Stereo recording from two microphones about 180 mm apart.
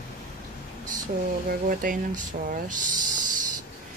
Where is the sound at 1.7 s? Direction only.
50° right (ahead or behind).